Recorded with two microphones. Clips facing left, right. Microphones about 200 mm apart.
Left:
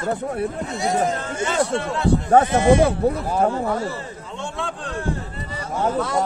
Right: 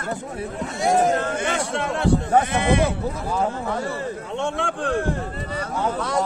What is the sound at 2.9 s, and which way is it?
Speech, 60° left (ahead or behind).